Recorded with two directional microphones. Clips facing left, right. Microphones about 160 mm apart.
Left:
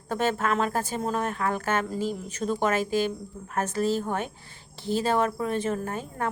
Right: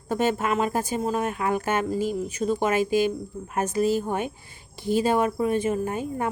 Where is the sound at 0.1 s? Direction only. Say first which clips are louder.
Right 2 dB; 10° right (ahead or behind).